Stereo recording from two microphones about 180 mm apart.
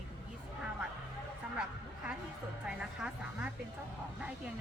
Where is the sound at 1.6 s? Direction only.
5° right (ahead or behind).